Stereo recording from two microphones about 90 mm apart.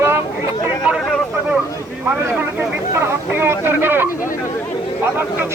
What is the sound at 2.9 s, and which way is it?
Speech, 30° right (ahead or behind).